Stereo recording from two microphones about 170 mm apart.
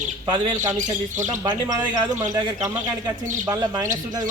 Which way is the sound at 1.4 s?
20° right (ahead or behind).